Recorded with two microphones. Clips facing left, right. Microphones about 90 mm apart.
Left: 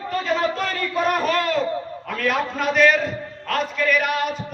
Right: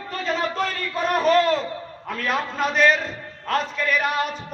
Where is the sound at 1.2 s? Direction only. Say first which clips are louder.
Right 2 dB; 35° right (ahead or behind).